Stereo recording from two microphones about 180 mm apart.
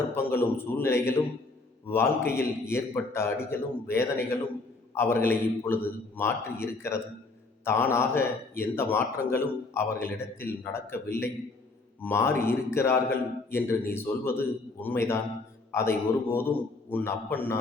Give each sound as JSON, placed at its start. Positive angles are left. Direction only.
{"t": 0.1, "sound": "speech", "side_deg": 10}